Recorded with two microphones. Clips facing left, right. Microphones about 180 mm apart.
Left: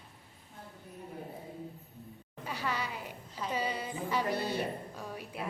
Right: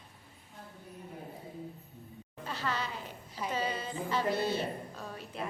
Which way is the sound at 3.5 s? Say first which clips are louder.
Even; 10° left (ahead or behind).